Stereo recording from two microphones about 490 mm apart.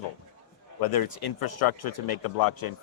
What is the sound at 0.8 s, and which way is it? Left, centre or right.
Speech, left.